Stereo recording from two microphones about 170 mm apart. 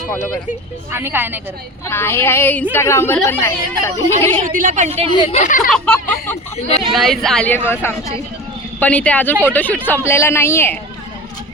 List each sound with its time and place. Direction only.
0.9 s speech: 15° right (ahead or behind)
1.9 s speech: 15° left (ahead or behind)
4.4 s a woman's voice: 50° right (ahead or behind)
5.1 s speech: 30° left (ahead or behind)
5.4 s speech: 50° left (ahead or behind)
5.7 s speech: 5° left (ahead or behind)